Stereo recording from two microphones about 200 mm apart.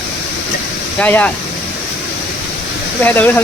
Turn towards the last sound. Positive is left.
turn(degrees=10)  # may be behind; listen again after turning